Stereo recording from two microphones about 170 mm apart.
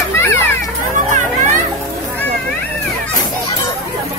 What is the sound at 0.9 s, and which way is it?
Children playing, 45° right (ahead or behind).